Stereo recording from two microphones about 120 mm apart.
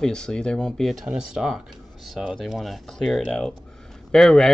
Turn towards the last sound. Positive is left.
turn(degrees=5)  # may be behind; listen again after turning